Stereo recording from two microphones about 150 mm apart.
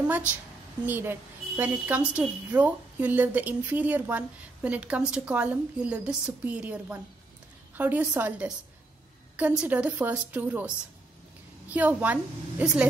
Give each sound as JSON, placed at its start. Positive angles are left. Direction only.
{"t": 0.0, "sound": "a woman's voice", "side_deg": -10}
{"t": 9.6, "sound": "a woman's voice", "side_deg": -10}
{"t": 11.7, "sound": "a woman's voice", "side_deg": -10}